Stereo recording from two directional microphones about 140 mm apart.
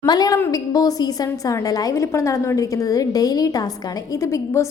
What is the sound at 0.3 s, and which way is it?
A woman's voice, 20° left (ahead or behind).